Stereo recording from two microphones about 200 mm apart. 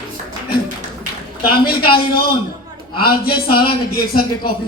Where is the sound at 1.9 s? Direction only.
50° left (ahead or behind).